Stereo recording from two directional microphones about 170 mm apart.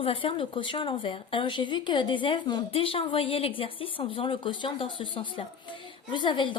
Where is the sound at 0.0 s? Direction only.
35° left (ahead or behind).